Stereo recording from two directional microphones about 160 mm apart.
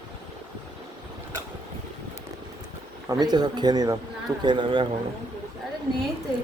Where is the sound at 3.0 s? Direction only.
25° right (ahead or behind).